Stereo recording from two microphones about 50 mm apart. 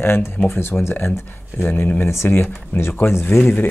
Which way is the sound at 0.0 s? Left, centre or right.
Left.